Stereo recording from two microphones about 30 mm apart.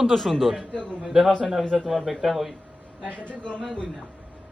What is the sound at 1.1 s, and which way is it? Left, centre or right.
Speech, centre.